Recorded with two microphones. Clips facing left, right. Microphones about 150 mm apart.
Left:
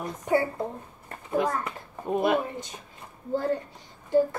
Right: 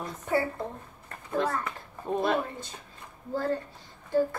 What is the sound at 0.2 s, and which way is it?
A woman's voice, 15° left (ahead or behind).